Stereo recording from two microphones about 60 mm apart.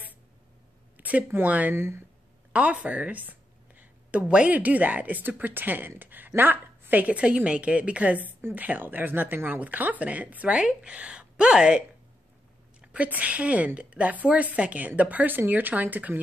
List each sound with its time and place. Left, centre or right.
0.9 s a sound: right
1.4 s a woman's voice: right
1.8 s speech: right
2.5 s a woman's voice: right
12.8 s a woman's voice: right